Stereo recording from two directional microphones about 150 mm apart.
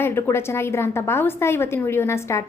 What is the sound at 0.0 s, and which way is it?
A woman's voice, 15° left (ahead or behind).